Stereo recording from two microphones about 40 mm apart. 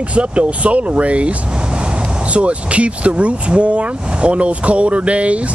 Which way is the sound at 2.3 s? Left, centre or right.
Right.